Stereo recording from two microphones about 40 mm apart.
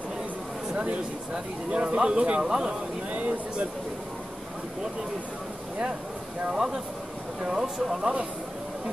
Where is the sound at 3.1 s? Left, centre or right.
Right.